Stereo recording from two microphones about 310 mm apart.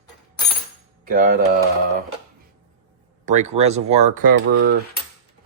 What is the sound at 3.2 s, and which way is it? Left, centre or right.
Speech, right.